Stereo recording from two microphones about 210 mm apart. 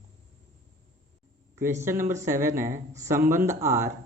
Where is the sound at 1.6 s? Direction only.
10° right (ahead or behind).